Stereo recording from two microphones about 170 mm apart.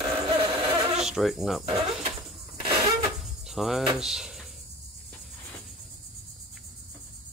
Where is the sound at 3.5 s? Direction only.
Centre (ahead or behind).